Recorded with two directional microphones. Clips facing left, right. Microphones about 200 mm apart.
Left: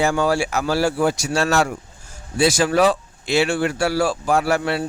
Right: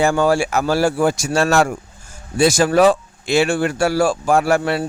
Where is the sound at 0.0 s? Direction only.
50° right (ahead or behind).